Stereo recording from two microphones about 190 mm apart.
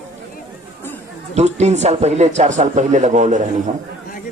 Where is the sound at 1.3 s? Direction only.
35° right (ahead or behind).